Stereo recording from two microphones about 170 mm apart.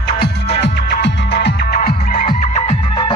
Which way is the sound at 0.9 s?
80° left.